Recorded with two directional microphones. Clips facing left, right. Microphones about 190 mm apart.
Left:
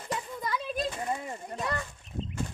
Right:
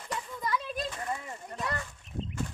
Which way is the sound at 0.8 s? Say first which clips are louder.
Left 3 dB; 25° left (ahead or behind).